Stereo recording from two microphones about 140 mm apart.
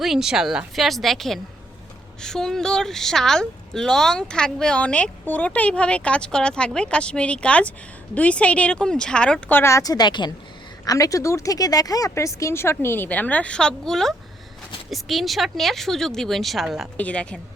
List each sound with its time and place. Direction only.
0.0 s speech: 5° right (ahead or behind)
17.0 s speech: 10° left (ahead or behind)